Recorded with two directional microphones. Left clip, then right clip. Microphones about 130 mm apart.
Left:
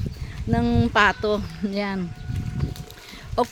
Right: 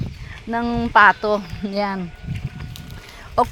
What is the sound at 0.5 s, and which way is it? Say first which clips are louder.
Speech: right 5 dB; 40° left (ahead or behind).